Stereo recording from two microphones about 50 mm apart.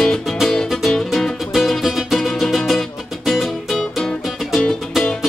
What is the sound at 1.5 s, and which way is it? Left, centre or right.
Music, centre.